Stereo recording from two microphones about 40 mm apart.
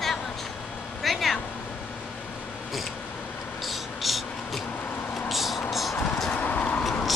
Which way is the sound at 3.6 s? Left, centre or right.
Centre.